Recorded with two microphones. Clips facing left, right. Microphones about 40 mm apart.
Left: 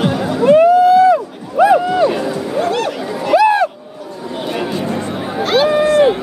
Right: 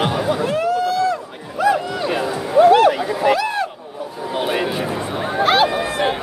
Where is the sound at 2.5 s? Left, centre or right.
Centre.